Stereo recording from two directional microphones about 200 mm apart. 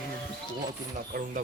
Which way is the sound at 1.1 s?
50° right (ahead or behind).